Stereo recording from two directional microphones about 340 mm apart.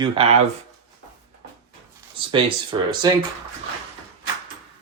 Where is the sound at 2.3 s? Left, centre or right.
Centre.